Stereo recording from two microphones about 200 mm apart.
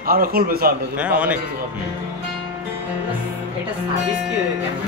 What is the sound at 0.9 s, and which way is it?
Music, 5° right (ahead or behind).